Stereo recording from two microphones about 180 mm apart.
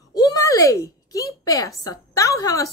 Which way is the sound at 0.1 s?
20° left (ahead or behind).